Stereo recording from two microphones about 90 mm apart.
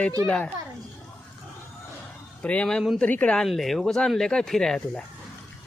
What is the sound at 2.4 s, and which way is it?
Speech, 15° left (ahead or behind).